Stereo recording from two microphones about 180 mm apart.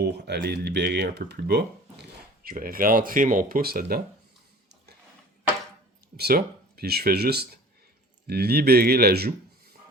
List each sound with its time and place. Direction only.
0.0 s speech: 65° right (ahead or behind)
6.1 s speech: 60° right (ahead or behind)